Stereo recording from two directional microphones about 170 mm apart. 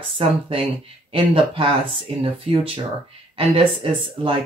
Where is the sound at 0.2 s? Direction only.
35° right (ahead or behind).